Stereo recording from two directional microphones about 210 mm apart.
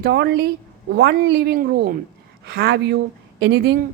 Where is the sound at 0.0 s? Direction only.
50° right (ahead or behind).